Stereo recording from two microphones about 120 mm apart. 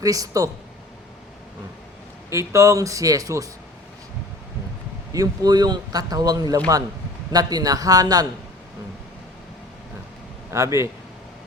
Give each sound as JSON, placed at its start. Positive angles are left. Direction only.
{"t": 0.0, "sound": "speech", "side_deg": -30}
{"t": 2.3, "sound": "speech", "side_deg": -25}
{"t": 5.1, "sound": "speech", "side_deg": -30}
{"t": 10.5, "sound": "speech", "side_deg": -25}